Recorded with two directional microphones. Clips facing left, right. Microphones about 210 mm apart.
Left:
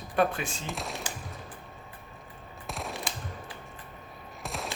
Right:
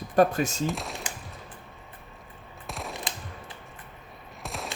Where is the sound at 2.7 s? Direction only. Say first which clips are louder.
Even; centre (ahead or behind).